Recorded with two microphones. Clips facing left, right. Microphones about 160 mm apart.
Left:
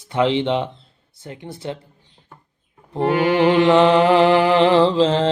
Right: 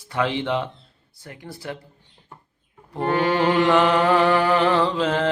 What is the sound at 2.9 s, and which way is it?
Music, 15° left (ahead or behind).